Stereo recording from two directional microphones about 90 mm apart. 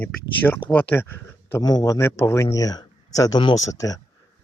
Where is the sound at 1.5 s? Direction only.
45° left (ahead or behind).